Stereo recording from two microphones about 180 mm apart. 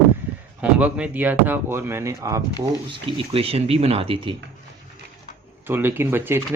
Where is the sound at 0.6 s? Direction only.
5° right (ahead or behind).